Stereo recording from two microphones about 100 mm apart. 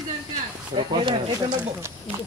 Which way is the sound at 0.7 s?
55° right (ahead or behind).